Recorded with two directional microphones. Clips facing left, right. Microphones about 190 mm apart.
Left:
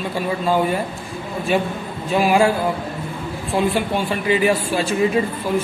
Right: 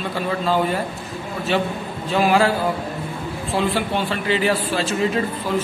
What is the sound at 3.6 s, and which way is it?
Speech, 15° left (ahead or behind).